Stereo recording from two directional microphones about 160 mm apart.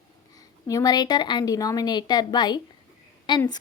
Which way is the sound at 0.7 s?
25° left (ahead or behind).